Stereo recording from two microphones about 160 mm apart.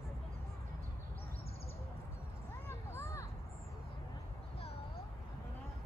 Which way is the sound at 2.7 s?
15° left (ahead or behind).